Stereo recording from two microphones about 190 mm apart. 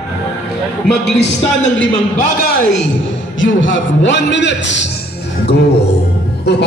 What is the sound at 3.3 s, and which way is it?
A man's voice, 85° left.